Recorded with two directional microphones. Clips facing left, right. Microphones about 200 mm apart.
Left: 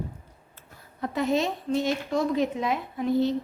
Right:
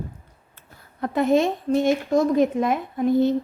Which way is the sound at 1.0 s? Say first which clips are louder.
Right 6 dB; 55° right (ahead or behind).